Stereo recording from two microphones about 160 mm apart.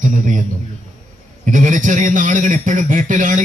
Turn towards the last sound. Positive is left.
turn(degrees=-55)  # may be behind; listen again after turning